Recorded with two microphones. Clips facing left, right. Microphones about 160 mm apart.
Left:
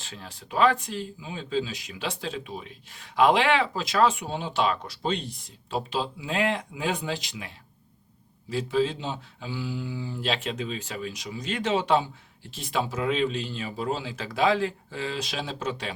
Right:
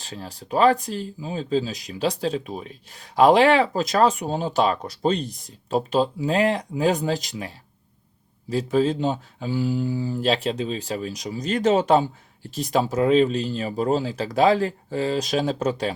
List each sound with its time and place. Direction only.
0.0 s speech: 40° right (ahead or behind)